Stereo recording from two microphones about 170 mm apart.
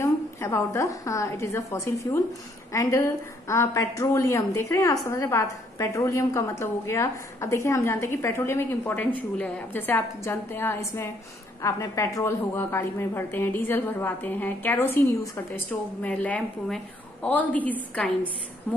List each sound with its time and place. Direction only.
0.0 s a woman's voice: 15° left (ahead or behind)